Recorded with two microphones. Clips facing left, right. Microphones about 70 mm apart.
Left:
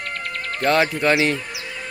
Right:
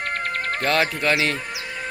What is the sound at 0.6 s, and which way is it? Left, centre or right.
Speech, centre.